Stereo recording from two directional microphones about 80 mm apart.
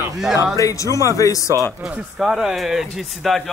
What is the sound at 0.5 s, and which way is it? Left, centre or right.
Speech, left.